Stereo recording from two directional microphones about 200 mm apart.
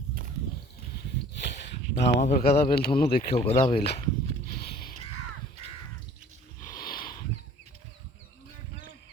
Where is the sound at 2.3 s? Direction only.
50° left (ahead or behind).